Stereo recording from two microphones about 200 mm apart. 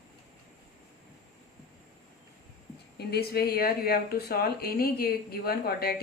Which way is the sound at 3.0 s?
55° left (ahead or behind).